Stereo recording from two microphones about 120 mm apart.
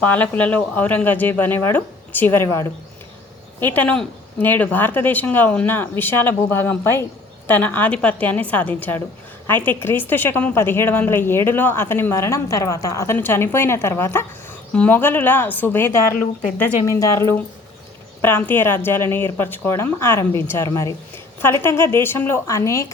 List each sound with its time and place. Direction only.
0.0 s speech: 15° left (ahead or behind)
2.5 s speech: 30° left (ahead or behind)
3.6 s a woman's voice: 15° left (ahead or behind)